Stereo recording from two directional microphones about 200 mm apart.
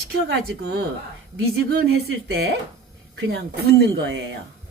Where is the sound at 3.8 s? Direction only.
60° right (ahead or behind).